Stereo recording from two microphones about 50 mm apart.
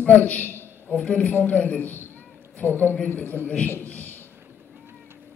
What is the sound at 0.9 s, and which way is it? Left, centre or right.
A man's voice, left.